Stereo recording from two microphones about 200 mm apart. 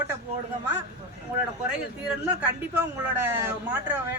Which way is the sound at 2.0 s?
5° right (ahead or behind).